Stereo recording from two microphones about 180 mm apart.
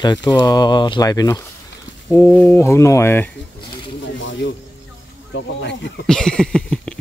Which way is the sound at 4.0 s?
90° left.